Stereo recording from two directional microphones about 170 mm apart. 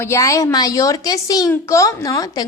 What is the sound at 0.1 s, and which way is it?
A woman's voice, 20° left (ahead or behind).